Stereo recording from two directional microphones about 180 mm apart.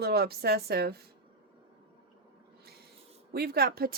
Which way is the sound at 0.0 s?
60° right (ahead or behind).